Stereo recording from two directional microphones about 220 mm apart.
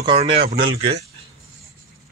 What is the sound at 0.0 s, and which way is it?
Speech, 25° right (ahead or behind).